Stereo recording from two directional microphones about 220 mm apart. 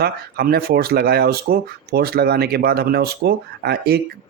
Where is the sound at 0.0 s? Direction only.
45° right (ahead or behind).